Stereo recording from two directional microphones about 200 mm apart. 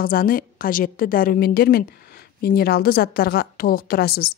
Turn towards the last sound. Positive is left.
turn(degrees=50)  # may be behind; listen again after turning